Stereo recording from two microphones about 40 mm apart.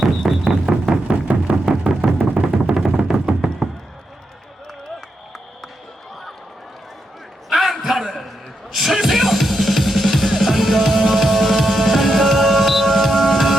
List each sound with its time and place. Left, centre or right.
0.0 s music: centre
1.0 s music: right
1.6 s music: centre
7.5 s a sound: centre
8.7 s music: centre